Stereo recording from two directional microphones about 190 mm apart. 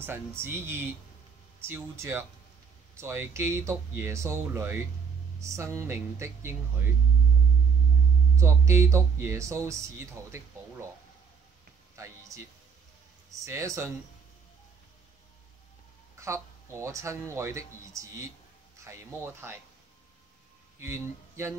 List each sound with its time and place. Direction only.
0.0 s speech: 10° right (ahead or behind)
8.4 s speech: 15° right (ahead or behind)
11.9 s a sound: 15° right (ahead or behind)
13.3 s speech: 15° right (ahead or behind)
16.2 s speech: 15° right (ahead or behind)
20.8 s speech: 15° right (ahead or behind)